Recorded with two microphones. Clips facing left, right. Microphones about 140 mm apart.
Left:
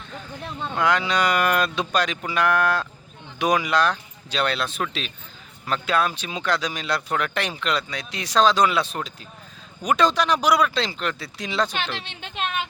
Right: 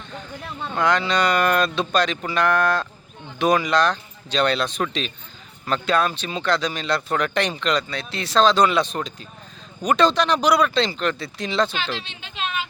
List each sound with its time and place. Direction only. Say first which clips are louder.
0.6 s speech: right 1 dB; 10° left (ahead or behind)
11.8 s speech: right 1 dB; 60° left (ahead or behind)